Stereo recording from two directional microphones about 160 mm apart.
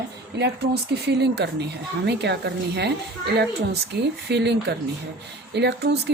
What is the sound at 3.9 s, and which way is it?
Speech, 90° right.